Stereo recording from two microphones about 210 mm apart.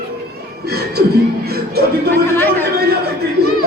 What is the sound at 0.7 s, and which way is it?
Speech, 50° right (ahead or behind).